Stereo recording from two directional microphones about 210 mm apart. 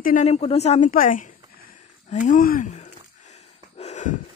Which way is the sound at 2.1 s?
35° left (ahead or behind).